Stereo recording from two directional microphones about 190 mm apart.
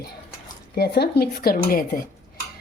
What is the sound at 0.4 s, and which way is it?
Speech, 55° left (ahead or behind).